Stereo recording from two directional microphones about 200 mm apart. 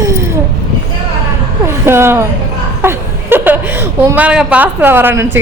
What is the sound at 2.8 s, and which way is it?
A woman's voice, 10° right (ahead or behind).